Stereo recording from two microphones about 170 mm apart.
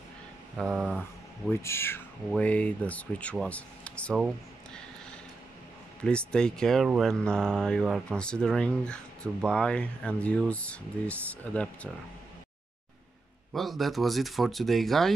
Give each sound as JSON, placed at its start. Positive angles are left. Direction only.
{"t": 0.6, "sound": "speech", "side_deg": -5}
{"t": 1.5, "sound": "speech", "side_deg": 15}
{"t": 6.0, "sound": "speech", "side_deg": 5}
{"t": 13.5, "sound": "speech", "side_deg": 0}